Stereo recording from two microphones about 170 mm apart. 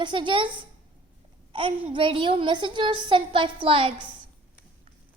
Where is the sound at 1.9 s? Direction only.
30° right (ahead or behind).